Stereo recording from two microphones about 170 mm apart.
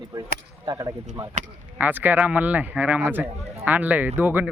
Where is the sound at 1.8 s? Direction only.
10° right (ahead or behind).